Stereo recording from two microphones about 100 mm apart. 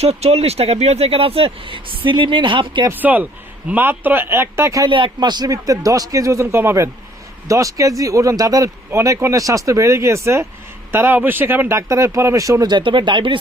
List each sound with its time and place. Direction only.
0.0 s speech: 90° right; by 2.9 s 55° right (ahead or behind)
2.9 s speech: 15° right (ahead or behind)
4.9 s speech: 55° right (ahead or behind)